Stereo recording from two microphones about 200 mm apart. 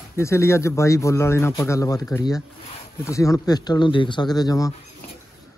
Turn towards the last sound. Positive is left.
turn(degrees=20)  # may be behind; listen again after turning